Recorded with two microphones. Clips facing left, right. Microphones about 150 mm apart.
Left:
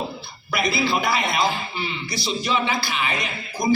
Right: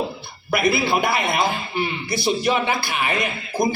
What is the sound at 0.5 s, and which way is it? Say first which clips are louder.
A man's voice: right 3 dB; 55° right (ahead or behind).